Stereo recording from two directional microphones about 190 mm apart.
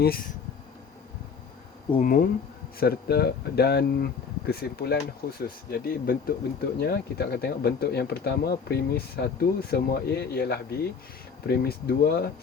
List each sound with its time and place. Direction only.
0.0 s speech: 55° left (ahead or behind)
2.0 s speech: 45° left (ahead or behind)